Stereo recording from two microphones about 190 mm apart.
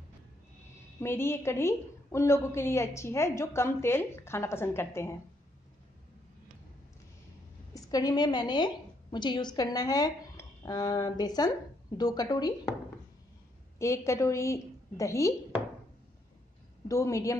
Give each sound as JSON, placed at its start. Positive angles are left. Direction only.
{"t": 1.0, "sound": "a woman's voice", "side_deg": 10}
{"t": 7.7, "sound": "a woman's voice", "side_deg": 20}
{"t": 13.7, "sound": "a woman's voice", "side_deg": 15}
{"t": 16.8, "sound": "a woman's voice", "side_deg": 15}